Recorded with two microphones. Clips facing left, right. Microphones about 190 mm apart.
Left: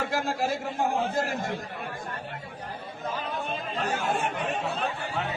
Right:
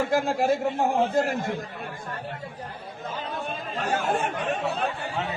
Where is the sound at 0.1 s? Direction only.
55° right (ahead or behind).